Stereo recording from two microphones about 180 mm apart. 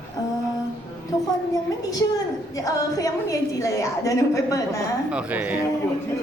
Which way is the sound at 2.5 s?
20° left (ahead or behind).